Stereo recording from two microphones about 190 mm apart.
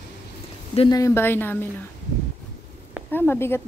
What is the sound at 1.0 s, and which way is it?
Speech, 10° left (ahead or behind).